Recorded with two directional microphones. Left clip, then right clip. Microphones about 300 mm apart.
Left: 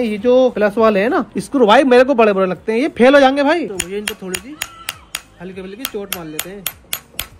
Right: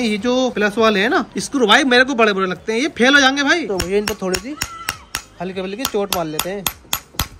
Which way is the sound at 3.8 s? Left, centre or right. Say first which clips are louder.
Right 4 dB; centre.